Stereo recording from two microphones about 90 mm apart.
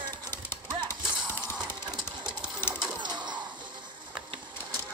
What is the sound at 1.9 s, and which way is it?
Sewing machine, 55° right (ahead or behind).